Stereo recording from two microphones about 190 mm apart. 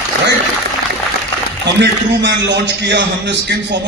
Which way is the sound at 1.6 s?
65° right (ahead or behind).